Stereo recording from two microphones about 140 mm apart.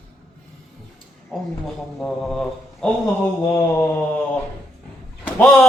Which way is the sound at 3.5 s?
20° left (ahead or behind).